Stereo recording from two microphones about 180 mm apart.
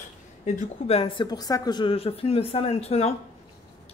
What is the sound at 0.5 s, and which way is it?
A woman's voice, 40° left (ahead or behind).